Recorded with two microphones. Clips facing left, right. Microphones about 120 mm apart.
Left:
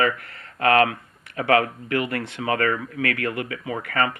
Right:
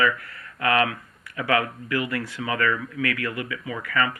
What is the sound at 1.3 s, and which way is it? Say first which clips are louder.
Speech: left 4 dB; 40° left (ahead or behind).